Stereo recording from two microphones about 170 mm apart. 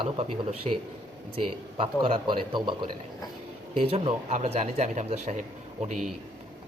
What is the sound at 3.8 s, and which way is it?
Speech, 35° right (ahead or behind).